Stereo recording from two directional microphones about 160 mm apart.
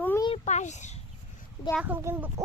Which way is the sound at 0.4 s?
45° left (ahead or behind).